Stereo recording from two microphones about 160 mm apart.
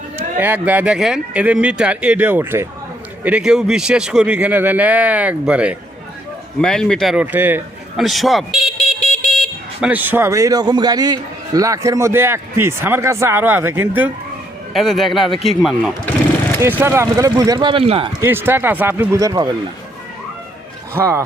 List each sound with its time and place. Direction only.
0.3 s a man's voice: 10° right (ahead or behind)
6.6 s a man's voice: 5° left (ahead or behind)
8.0 s a man's voice: centre (ahead or behind)
9.8 s a man's voice: 10° right (ahead or behind)
14.7 s a man's voice: centre (ahead or behind)
16.6 s speech: 15° right (ahead or behind); by 18.1 s 35° right (ahead or behind)
18.2 s a man's voice: 15° right (ahead or behind)
20.9 s a man's voice: 20° right (ahead or behind)